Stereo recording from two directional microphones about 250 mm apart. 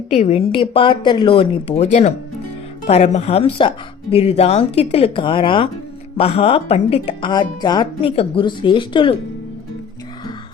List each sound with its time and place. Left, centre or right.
0.1 s speech: left